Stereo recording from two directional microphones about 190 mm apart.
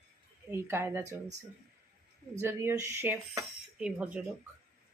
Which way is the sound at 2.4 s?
15° right (ahead or behind).